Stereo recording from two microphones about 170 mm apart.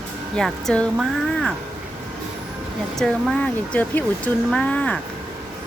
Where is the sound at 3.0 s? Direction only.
5° left (ahead or behind).